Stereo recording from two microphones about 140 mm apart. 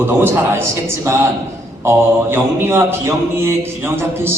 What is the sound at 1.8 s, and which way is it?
Mantra, 20° right (ahead or behind).